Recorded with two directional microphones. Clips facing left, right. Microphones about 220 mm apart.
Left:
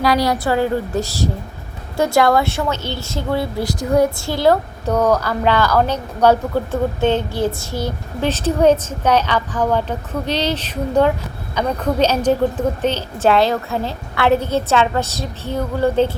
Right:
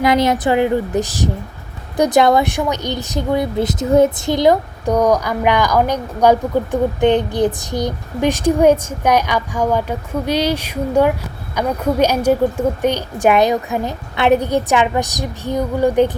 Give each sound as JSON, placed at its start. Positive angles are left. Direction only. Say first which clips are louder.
{"t": 0.0, "sound": "a woman's voice", "louder": "right 2 dB", "side_deg": -20}